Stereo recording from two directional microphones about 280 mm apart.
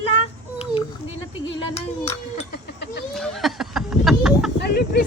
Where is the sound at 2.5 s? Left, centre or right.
Left.